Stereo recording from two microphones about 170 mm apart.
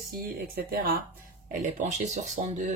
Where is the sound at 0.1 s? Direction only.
60° right (ahead or behind).